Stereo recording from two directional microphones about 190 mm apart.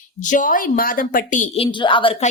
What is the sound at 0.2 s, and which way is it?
Speech, 40° left (ahead or behind).